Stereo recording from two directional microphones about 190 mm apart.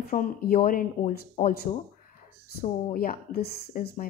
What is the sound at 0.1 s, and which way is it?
Speech, 50° left (ahead or behind).